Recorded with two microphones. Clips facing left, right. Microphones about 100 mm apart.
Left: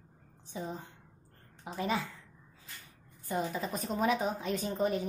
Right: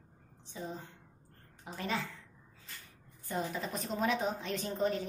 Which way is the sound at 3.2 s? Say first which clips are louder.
Left 3 dB; 10° left (ahead or behind).